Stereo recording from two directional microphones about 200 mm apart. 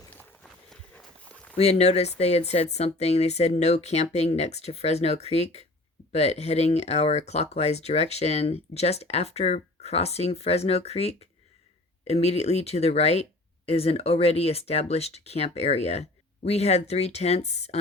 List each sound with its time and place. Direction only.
0.1 s run: 5° left (ahead or behind)
1.5 s speech: 35° left (ahead or behind)